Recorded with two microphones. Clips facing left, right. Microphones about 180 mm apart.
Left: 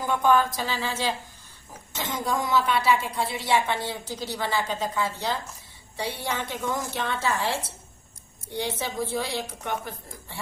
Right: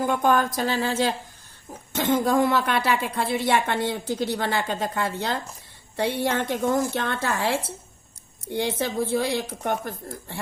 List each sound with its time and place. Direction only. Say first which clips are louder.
0.0 s a woman's voice: right 1 dB; 50° right (ahead or behind)